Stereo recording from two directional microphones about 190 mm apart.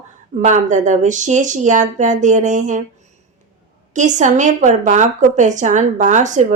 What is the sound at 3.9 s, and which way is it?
A woman's voice, 40° right (ahead or behind).